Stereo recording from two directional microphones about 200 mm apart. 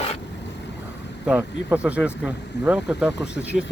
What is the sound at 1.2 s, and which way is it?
Speech, 5° right (ahead or behind).